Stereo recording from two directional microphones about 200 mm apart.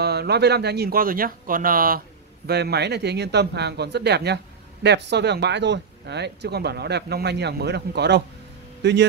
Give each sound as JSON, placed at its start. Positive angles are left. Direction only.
{"t": 0.0, "sound": "speech", "side_deg": -55}